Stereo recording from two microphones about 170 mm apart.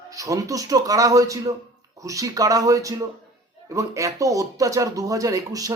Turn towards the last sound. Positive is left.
turn(degrees=-20)  # may be behind; listen again after turning